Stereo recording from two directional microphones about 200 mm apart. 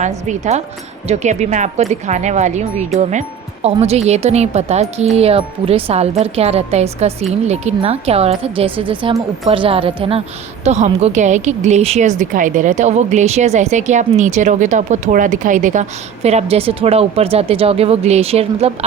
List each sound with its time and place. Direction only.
0.0 s a woman's voice: 35° right (ahead or behind)